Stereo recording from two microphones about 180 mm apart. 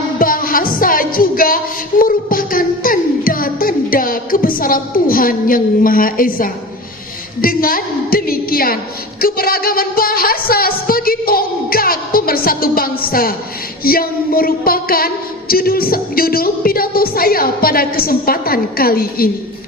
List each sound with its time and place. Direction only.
0.2 s music: 50° left (ahead or behind)
7.4 s a sound: 50° left (ahead or behind)
13.8 s speech: 55° left (ahead or behind)